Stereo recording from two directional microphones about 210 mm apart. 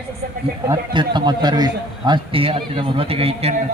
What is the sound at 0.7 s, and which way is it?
A man's voice, 20° right (ahead or behind).